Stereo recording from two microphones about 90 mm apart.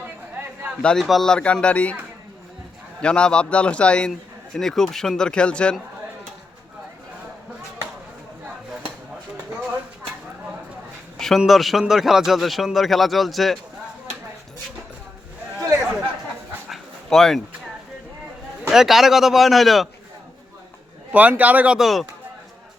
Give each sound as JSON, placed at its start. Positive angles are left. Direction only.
{"t": 0.8, "sound": "speech", "side_deg": 10}
{"t": 3.0, "sound": "speech", "side_deg": 10}
{"t": 11.2, "sound": "a man's voice", "side_deg": 0}
{"t": 16.6, "sound": "dog", "side_deg": 0}
{"t": 18.7, "sound": "a man's voice", "side_deg": -5}
{"t": 21.1, "sound": "a man's voice", "side_deg": -15}
{"t": 21.8, "sound": "a man's voice", "side_deg": 0}